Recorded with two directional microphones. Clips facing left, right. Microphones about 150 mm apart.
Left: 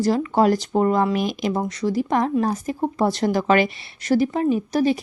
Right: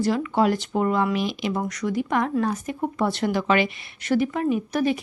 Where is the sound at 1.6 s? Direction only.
30° left (ahead or behind).